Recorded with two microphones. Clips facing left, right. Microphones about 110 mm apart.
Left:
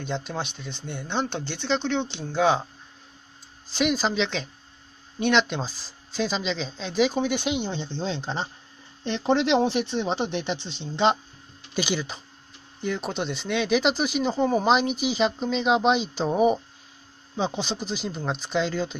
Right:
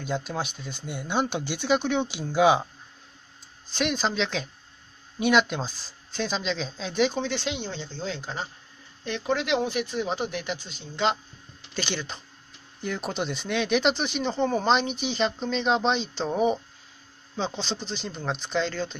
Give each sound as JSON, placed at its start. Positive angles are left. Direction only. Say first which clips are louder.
{"t": 0.0, "sound": "speech", "louder": "even", "side_deg": -5}
{"t": 3.7, "sound": "speech", "louder": "left 3 dB", "side_deg": 0}
{"t": 11.7, "sound": "speech", "louder": "left 4 dB", "side_deg": 10}